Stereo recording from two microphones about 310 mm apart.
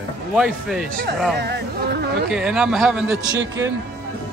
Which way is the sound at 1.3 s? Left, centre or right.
Right.